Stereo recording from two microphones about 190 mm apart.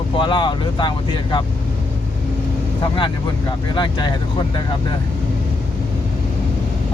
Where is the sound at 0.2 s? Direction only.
25° left (ahead or behind).